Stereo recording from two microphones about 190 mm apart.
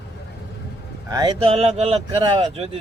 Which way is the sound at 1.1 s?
20° right (ahead or behind).